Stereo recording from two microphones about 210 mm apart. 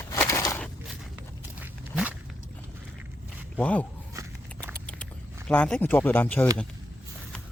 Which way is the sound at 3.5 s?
5° left (ahead or behind).